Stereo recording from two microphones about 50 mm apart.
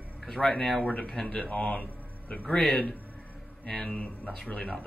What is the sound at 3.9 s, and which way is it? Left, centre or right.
Speech, centre.